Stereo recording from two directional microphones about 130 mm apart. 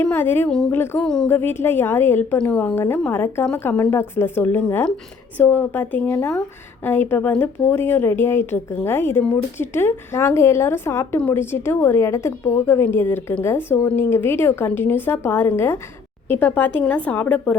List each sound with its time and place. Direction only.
0.0 s a woman's voice: 20° left (ahead or behind)
0.9 s a woman's voice: 5° left (ahead or behind)
1.3 s a woman's voice: 15° left (ahead or behind)
2.7 s a woman's voice: 20° left (ahead or behind)